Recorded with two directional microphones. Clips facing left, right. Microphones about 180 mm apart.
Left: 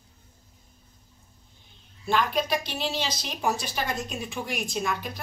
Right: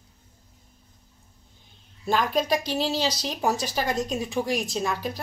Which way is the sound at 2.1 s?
40° right (ahead or behind).